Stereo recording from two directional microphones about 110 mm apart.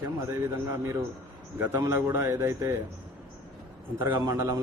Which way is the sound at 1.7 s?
25° right (ahead or behind).